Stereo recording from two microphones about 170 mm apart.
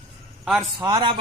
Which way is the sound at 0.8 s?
25° right (ahead or behind).